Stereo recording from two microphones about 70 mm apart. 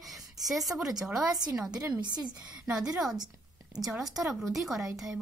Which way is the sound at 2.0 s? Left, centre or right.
Right.